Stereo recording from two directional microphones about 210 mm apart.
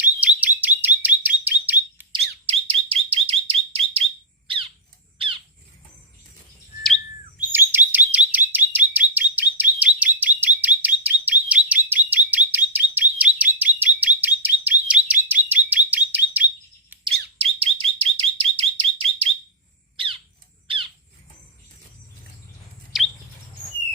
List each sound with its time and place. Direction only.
0.0 s bird: 5° right (ahead or behind)
2.5 s bird: 25° right (ahead or behind)
4.4 s squawk: 25° right (ahead or behind)
6.8 s bird: centre (ahead or behind)
7.5 s chirp: 10° right (ahead or behind)
17.3 s bird: 25° right (ahead or behind)
20.7 s bird: 25° right (ahead or behind)
22.9 s chirp: centre (ahead or behind)